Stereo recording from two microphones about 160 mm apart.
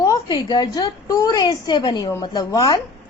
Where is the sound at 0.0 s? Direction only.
25° left (ahead or behind).